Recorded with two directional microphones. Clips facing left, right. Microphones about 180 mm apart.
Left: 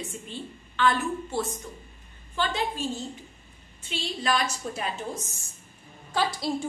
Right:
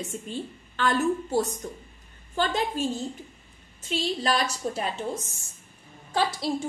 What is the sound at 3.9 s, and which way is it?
A woman's voice, 35° right (ahead or behind).